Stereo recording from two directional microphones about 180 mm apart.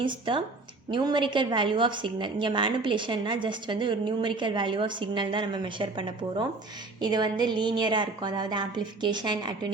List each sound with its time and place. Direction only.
0.0 s a woman's voice: 25° right (ahead or behind)